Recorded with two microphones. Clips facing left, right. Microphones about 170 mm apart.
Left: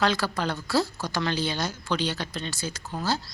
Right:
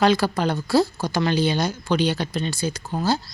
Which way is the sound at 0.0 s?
15° right (ahead or behind).